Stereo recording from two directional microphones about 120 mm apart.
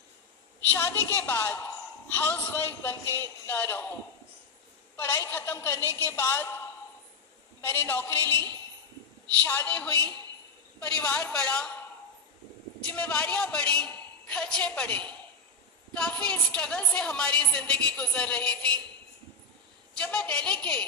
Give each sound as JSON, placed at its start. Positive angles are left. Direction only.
{"t": 0.7, "sound": "a woman's voice", "side_deg": 20}
{"t": 4.9, "sound": "a woman's voice", "side_deg": 25}
{"t": 7.6, "sound": "a woman's voice", "side_deg": 20}
{"t": 9.4, "sound": "a woman's voice", "side_deg": 15}
{"t": 12.9, "sound": "a woman's voice", "side_deg": 10}
{"t": 19.9, "sound": "a woman's voice", "side_deg": 5}